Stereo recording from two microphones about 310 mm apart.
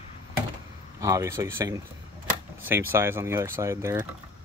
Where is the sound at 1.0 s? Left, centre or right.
Centre.